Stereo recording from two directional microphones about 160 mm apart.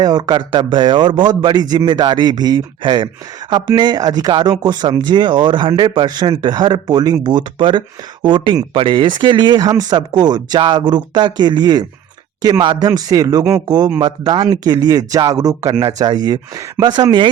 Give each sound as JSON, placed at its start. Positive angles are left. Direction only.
{"t": 0.0, "sound": "speech", "side_deg": -25}